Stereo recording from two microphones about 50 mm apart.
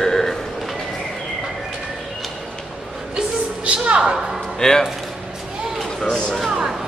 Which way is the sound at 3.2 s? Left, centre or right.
Centre.